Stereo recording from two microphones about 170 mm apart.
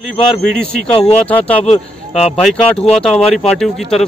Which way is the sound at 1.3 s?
10° left (ahead or behind).